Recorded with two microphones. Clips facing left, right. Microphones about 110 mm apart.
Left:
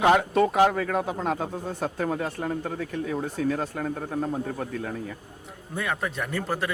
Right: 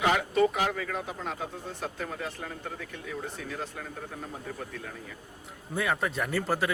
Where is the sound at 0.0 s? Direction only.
45° left (ahead or behind).